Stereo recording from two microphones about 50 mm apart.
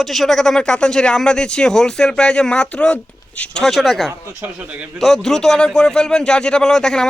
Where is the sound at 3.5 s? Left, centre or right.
Centre.